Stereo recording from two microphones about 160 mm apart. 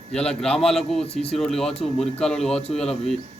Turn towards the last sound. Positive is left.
turn(degrees=0)  # may be behind; listen again after turning